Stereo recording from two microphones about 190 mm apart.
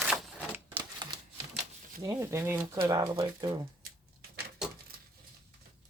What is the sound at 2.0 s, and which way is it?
Speech, 15° right (ahead or behind).